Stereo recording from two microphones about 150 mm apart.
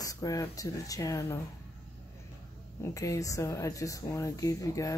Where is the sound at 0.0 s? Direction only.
25° left (ahead or behind).